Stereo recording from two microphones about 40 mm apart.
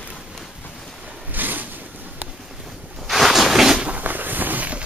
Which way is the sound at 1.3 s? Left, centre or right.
Right.